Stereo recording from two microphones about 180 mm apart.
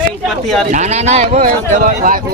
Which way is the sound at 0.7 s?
40° right (ahead or behind).